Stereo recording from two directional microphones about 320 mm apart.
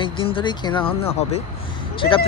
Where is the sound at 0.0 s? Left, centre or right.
Centre.